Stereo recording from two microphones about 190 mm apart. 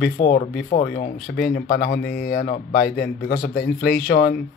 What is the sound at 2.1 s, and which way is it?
Speech, 50° left (ahead or behind).